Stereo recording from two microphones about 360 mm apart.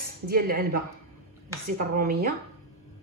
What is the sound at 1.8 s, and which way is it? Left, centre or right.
Speech, right.